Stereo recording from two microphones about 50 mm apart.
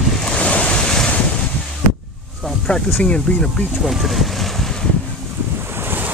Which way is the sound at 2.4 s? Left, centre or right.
Centre.